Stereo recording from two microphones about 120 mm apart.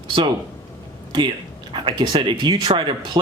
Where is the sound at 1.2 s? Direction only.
40° right (ahead or behind).